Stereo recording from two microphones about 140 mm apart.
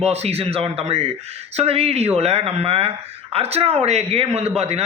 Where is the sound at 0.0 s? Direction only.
50° right (ahead or behind).